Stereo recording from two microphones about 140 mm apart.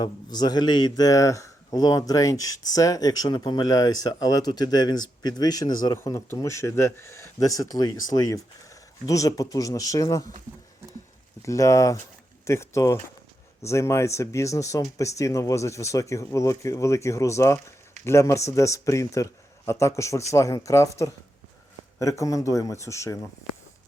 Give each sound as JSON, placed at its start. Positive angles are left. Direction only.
{"t": 0.0, "sound": "a man's voice", "side_deg": 30}
{"t": 11.4, "sound": "a man's voice", "side_deg": 20}
{"t": 22.2, "sound": "a man's voice", "side_deg": 25}